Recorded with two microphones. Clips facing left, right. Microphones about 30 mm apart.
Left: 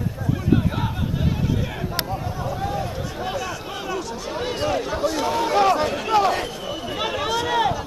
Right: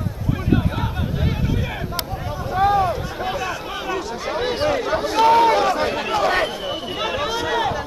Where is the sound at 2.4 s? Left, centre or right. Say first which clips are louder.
Right 12 dB; right.